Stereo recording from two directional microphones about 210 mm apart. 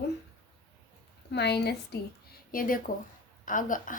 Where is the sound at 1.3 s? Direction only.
50° left (ahead or behind).